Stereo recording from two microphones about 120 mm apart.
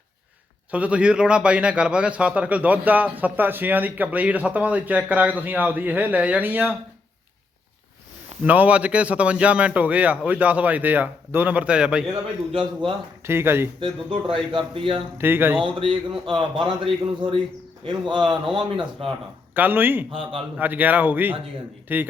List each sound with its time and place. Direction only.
0.7 s a man's voice: 10° right (ahead or behind)
8.4 s a man's voice: 10° right (ahead or behind)
12.5 s a man's voice: 50° right (ahead or behind)
13.2 s speech: 20° right (ahead or behind)
14.1 s a man's voice: 50° right (ahead or behind)
15.2 s a man's voice: 20° right (ahead or behind)
15.6 s a man's voice: 45° right (ahead or behind)
19.5 s a man's voice: 15° right (ahead or behind)
20.1 s a man's voice: 50° right (ahead or behind)
20.6 s a man's voice: 15° right (ahead or behind)